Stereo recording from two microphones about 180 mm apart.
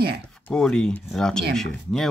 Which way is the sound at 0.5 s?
5° left (ahead or behind).